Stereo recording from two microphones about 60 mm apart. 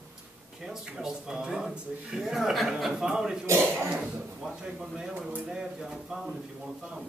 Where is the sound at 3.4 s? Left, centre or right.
Right.